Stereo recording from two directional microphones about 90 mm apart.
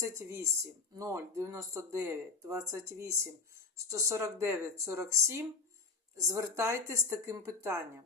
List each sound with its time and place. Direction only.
0.0 s speech: 35° right (ahead or behind)